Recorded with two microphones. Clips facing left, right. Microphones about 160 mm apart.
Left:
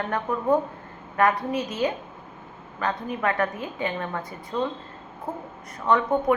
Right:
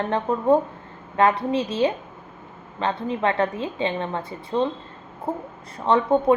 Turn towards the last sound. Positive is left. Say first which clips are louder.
# right 3 dB
turn(degrees=-25)  # may be behind; listen again after turning